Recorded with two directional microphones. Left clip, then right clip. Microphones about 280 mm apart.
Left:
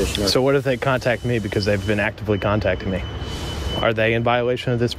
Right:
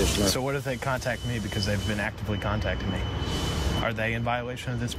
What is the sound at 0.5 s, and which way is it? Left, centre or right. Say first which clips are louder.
Speech: left 10 dB; left.